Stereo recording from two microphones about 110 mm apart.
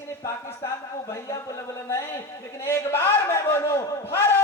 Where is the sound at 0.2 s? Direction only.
25° left (ahead or behind).